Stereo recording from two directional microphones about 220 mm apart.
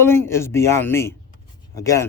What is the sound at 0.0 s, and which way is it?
Speech, 10° left (ahead or behind).